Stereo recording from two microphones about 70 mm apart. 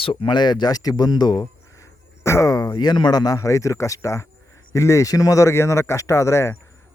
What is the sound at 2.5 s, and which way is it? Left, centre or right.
Speech, left.